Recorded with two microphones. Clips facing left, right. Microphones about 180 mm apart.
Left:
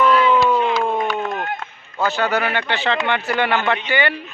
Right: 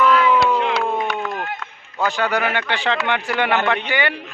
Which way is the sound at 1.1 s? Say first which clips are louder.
Left 2 dB; 40° left (ahead or behind).